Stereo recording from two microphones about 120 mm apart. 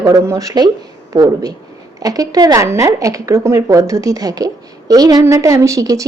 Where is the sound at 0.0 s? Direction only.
30° right (ahead or behind).